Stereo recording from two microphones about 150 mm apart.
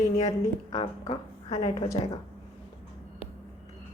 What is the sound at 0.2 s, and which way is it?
A woman's voice, 30° left (ahead or behind).